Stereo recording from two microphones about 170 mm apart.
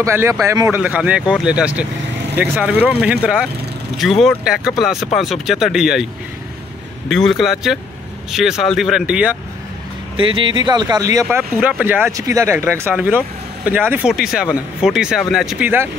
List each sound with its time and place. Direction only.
0.0 s speech: 15° right (ahead or behind)
7.1 s speech: centre (ahead or behind)
10.1 s speech: 30° right (ahead or behind); by 15.9 s 10° right (ahead or behind)